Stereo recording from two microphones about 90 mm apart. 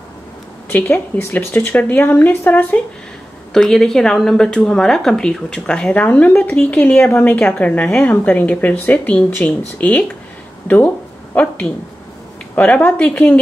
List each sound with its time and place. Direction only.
0.7 s a woman's voice: 20° left (ahead or behind)
3.5 s speech: 5° left (ahead or behind)
11.3 s speech: 15° left (ahead or behind)